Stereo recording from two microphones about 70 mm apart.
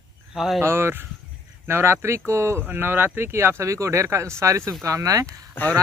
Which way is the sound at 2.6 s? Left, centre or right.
Right.